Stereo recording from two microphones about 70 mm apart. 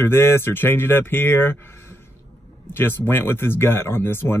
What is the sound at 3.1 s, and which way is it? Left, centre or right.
Speech, left.